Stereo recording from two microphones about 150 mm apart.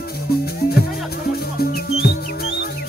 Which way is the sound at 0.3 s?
90° left.